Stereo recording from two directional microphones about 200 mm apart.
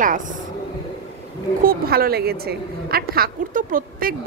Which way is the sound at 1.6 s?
50° right (ahead or behind).